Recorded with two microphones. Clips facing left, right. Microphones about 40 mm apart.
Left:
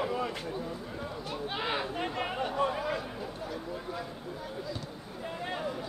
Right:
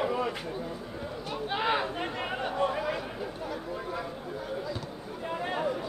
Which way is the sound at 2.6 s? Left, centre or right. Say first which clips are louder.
Right 2 dB; centre.